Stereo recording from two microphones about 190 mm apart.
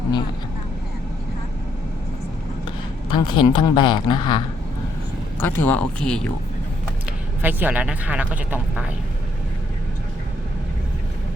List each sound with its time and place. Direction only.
2.6 s a woman's voice: 25° left (ahead or behind)
5.4 s speech: 10° left (ahead or behind)
7.4 s speech: 10° right (ahead or behind)